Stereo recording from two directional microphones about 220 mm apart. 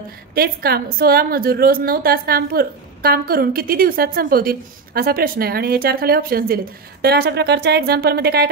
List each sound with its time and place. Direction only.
0.3 s a woman's voice: 45° right (ahead or behind)